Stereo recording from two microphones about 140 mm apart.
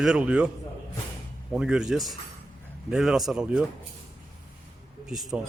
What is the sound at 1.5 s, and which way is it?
Speech, 5° right (ahead or behind).